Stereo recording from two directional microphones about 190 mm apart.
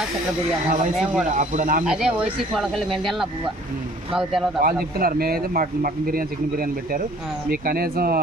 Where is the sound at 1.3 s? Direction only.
40° right (ahead or behind).